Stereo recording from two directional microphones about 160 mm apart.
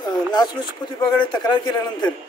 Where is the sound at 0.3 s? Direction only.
25° left (ahead or behind).